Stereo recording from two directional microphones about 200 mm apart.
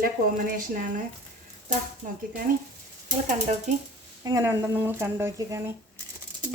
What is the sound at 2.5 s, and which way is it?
Speech, 45° right (ahead or behind).